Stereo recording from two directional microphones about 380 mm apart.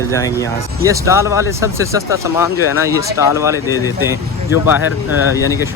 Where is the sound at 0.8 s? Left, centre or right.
Centre.